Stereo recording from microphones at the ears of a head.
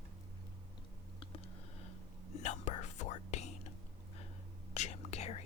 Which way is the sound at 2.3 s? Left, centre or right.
Left.